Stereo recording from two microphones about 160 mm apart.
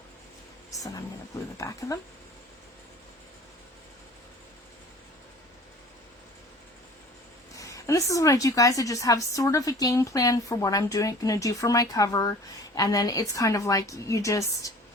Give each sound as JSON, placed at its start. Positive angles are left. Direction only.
{"t": 1.5, "sound": "a woman's voice", "side_deg": 20}
{"t": 7.5, "sound": "a woman's voice", "side_deg": 20}